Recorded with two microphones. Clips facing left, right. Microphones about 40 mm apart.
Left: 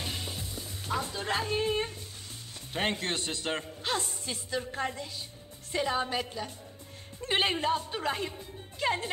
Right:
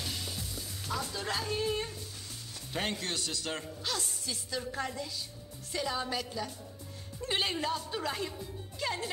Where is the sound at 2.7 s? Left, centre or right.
Left.